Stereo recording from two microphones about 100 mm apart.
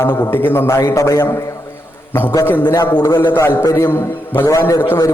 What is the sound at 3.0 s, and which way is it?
Speech, 45° left (ahead or behind).